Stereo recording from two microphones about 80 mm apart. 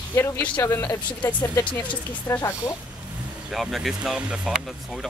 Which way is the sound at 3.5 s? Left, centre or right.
Centre.